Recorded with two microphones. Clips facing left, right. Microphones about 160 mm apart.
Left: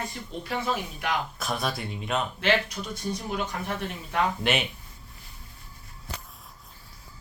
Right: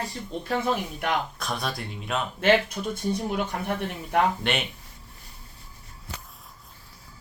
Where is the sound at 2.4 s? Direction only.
50° right (ahead or behind).